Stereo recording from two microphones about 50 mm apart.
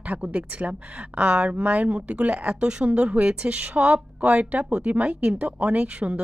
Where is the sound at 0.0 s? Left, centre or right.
Right.